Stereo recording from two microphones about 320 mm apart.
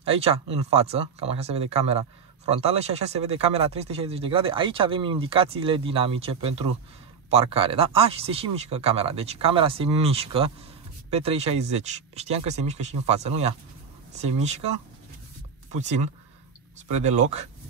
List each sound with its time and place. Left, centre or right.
0.0 s speech: centre
15.7 s speech: right
17.0 s speech: right